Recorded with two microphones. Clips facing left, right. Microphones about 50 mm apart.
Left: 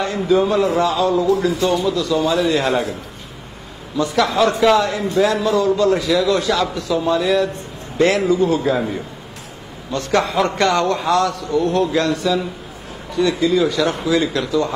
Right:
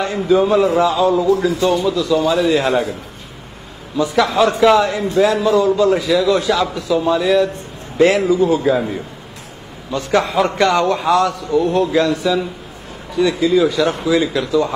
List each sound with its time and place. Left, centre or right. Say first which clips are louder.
0.2 s a man's voice: right 3 dB; centre
3.9 s a man's voice: right 2 dB; centre
13.1 s speech: right 2 dB; right
13.6 s a man's voice: right 2 dB; centre